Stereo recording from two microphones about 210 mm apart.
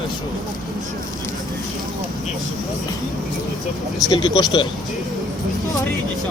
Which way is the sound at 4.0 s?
20° left (ahead or behind).